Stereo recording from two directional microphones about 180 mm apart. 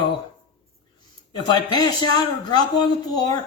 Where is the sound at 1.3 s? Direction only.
25° left (ahead or behind).